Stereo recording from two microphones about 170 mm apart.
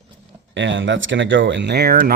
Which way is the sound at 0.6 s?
90° right.